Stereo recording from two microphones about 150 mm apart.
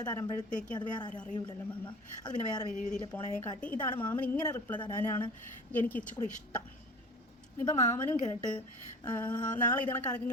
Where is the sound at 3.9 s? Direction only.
30° left (ahead or behind).